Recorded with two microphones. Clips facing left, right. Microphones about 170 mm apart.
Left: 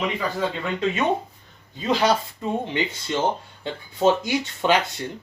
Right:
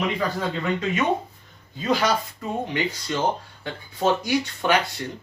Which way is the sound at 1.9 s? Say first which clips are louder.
Left 2 dB; 25° left (ahead or behind).